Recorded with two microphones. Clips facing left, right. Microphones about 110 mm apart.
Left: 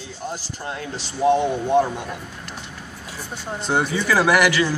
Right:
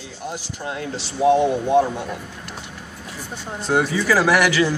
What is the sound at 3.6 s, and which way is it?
Speech, 5° right (ahead or behind).